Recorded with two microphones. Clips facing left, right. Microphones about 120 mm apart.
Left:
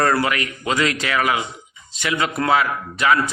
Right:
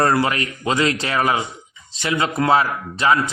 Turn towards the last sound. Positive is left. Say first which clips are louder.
# right 1 dB
turn(degrees=-30)  # may be behind; listen again after turning